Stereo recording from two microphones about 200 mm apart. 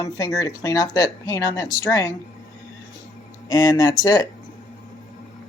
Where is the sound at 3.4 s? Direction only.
20° left (ahead or behind).